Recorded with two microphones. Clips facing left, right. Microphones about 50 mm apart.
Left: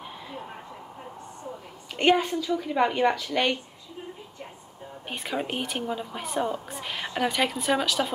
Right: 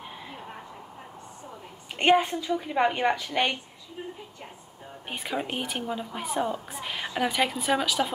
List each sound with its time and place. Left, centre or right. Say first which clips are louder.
2.0 s a woman's voice: even; right
5.0 s a woman's voice: left 1 dB; centre